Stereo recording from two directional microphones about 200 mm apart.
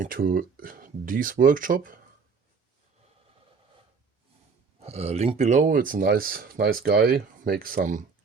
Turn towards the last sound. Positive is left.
turn(degrees=-45)  # may be behind; listen again after turning